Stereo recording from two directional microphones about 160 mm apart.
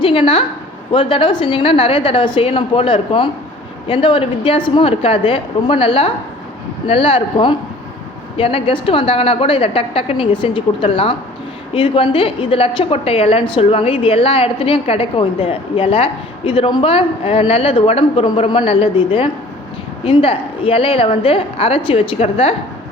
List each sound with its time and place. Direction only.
0.0 s a woman's voice: 35° left (ahead or behind)